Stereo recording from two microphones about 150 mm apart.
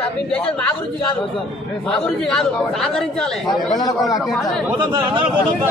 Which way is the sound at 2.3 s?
5° left (ahead or behind).